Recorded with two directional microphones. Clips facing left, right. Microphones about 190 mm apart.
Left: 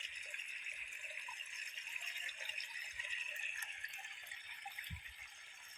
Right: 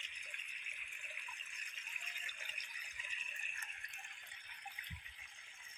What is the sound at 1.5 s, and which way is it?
Rattle, 30° left (ahead or behind).